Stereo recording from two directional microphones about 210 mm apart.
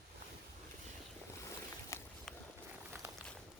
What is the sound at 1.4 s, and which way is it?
Boat, 15° left (ahead or behind).